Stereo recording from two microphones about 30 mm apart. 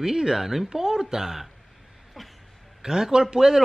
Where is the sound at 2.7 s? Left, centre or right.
Centre.